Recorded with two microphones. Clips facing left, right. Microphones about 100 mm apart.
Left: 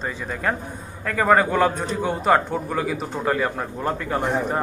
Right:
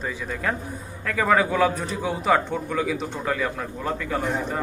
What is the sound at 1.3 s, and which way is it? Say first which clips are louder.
A man's voice: left 2 dB; centre (ahead or behind).